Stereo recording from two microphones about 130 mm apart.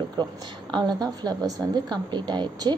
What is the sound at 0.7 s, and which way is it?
Speech, 30° right (ahead or behind).